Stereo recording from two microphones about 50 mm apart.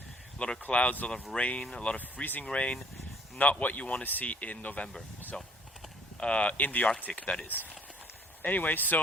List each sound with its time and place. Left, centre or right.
0.3 s speech: left
2.0 s speech: left
5.3 s speech: centre; by 9.0 s left